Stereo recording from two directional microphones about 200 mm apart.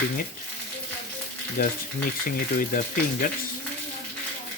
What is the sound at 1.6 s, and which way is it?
Speech, 45° left (ahead or behind).